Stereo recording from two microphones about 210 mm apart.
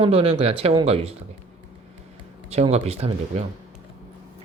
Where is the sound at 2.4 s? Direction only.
30° right (ahead or behind).